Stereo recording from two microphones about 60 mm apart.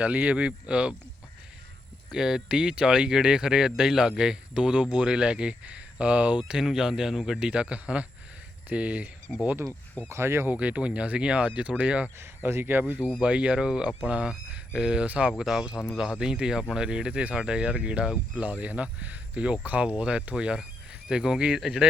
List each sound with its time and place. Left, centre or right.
0.0 s speech: right
2.1 s speech: centre
6.5 s speech: centre
7.3 s speech: centre
10.1 s speech: right
10.5 s speech: right
12.2 s speech: right
13.1 s speech: right
15.0 s speech: right
15.3 s speech: centre